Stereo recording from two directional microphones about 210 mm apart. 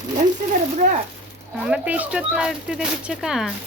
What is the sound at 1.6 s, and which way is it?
Speech, 5° right (ahead or behind).